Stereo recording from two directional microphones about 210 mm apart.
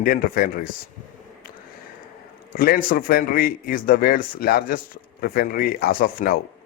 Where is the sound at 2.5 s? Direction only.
45° left (ahead or behind).